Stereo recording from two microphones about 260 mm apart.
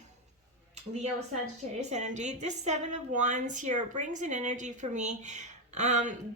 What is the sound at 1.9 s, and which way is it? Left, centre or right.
A woman's voice, right.